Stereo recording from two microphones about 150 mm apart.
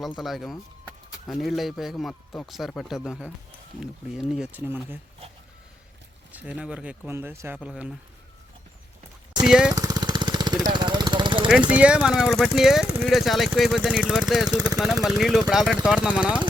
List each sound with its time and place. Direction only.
0.0 s speech: centre (ahead or behind)
6.3 s speech: 10° right (ahead or behind)
9.4 s speech: 5° right (ahead or behind)
9.7 s jackhammer: 25° right (ahead or behind)
10.6 s vehicle: 30° right (ahead or behind)
11.7 s speech: 10° right (ahead or behind)